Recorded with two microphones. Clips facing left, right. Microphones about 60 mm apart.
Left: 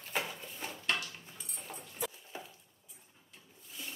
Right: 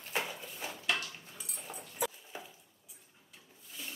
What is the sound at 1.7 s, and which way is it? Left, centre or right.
Clip-clop, centre.